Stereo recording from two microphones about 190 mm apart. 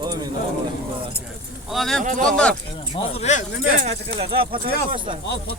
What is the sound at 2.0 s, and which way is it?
Speech, 45° right (ahead or behind).